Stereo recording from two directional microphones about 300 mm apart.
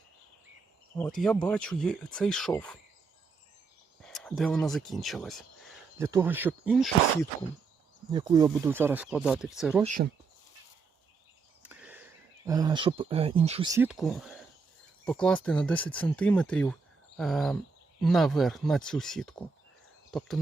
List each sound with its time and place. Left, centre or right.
0.9 s speech: centre
4.0 s speech: centre
8.1 s speech: centre
9.8 s speech: right
11.6 s a sound: centre
12.5 s speech: centre